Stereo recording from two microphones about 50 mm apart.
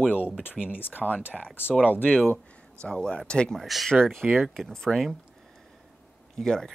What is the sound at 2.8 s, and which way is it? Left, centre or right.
Speech, centre.